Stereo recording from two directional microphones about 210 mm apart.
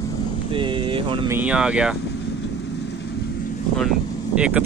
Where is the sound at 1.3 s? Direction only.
5° right (ahead or behind).